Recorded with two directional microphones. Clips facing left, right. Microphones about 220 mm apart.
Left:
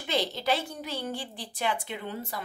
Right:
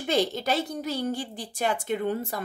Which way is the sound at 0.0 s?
50° right (ahead or behind).